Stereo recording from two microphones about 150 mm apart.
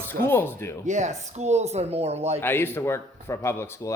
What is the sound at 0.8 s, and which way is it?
Speech, 50° right (ahead or behind).